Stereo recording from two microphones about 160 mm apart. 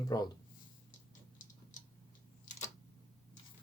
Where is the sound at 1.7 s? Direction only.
55° left (ahead or behind).